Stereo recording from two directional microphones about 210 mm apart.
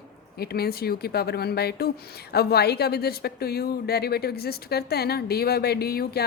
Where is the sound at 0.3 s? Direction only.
50° left (ahead or behind).